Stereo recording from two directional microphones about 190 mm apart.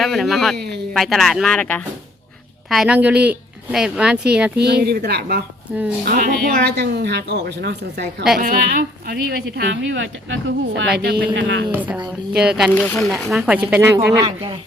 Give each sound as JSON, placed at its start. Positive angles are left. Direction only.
{"t": 0.0, "sound": "a woman's voice", "side_deg": 0}
{"t": 0.5, "sound": "speech", "side_deg": -60}
{"t": 0.9, "sound": "a woman's voice", "side_deg": 0}
{"t": 4.5, "sound": "speech", "side_deg": -60}
{"t": 8.4, "sound": "a woman's voice", "side_deg": -45}
{"t": 9.6, "sound": "speech", "side_deg": -75}
{"t": 10.9, "sound": "speech", "side_deg": -55}
{"t": 11.3, "sound": "speech", "side_deg": -70}
{"t": 12.4, "sound": "a woman's voice", "side_deg": -5}